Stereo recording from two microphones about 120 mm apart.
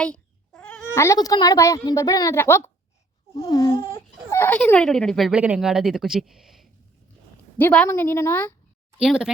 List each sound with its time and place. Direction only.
0.0 s cat: 10° left (ahead or behind)
0.9 s a woman's voice: 25° left (ahead or behind); by 5.3 s 5° left (ahead or behind)
5.3 s speech: 10° right (ahead or behind)
7.6 s speech: 10° left (ahead or behind)
7.9 s a woman's voice: 20° left (ahead or behind)
9.0 s speech: 5° right (ahead or behind)